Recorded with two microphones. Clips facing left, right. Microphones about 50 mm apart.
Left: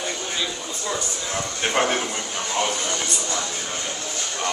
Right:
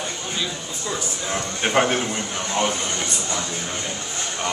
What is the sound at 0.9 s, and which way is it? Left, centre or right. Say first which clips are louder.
A man's voice: right 3 dB; centre.